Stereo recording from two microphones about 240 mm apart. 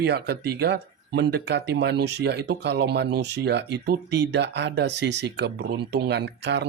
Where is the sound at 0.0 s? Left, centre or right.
Right.